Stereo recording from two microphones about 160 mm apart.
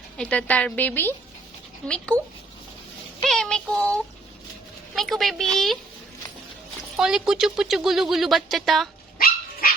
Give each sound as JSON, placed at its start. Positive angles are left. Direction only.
{"t": 0.2, "sound": "a woman's voice", "side_deg": 5}
{"t": 3.2, "sound": "speech", "side_deg": 5}
{"t": 6.9, "sound": "speech", "side_deg": -5}
{"t": 9.1, "sound": "dog", "side_deg": 65}